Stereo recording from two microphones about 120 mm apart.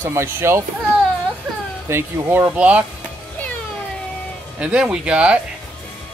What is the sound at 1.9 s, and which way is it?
Speech, 15° right (ahead or behind).